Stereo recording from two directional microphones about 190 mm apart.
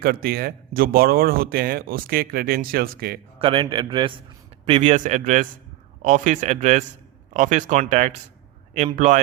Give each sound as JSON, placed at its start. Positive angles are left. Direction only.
{"t": 0.0, "sound": "speech", "side_deg": -50}
{"t": 3.3, "sound": "a man's voice", "side_deg": -25}